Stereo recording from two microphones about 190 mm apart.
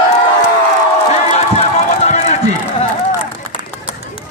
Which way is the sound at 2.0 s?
35° left (ahead or behind).